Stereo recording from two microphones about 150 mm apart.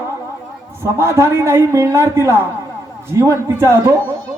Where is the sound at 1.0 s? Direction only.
15° right (ahead or behind).